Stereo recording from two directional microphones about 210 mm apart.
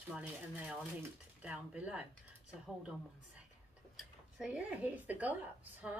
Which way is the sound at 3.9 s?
5° right (ahead or behind).